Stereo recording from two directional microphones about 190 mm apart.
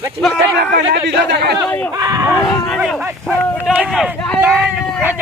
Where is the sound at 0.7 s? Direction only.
60° right (ahead or behind).